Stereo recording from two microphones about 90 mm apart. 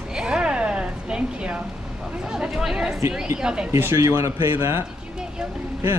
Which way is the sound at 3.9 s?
35° right (ahead or behind).